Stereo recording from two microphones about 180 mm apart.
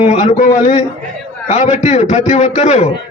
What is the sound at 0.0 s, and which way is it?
A man's voice, 40° left (ahead or behind).